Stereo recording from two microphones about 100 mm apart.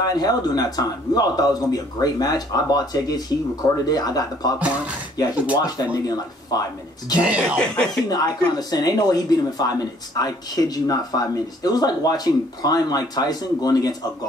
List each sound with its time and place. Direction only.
0.0 s speech: 40° left (ahead or behind)
4.6 s speech: 10° right (ahead or behind)
5.1 s speech: 40° left (ahead or behind)
7.2 s speech: 10° right (ahead or behind)
7.5 s speech: 5° left (ahead or behind)
8.5 s speech: 40° left (ahead or behind)